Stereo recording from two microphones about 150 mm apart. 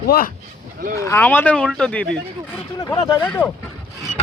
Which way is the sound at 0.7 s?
75° right (ahead or behind).